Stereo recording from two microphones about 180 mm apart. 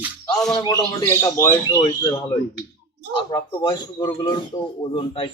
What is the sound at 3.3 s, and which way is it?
Speech, 20° left (ahead or behind).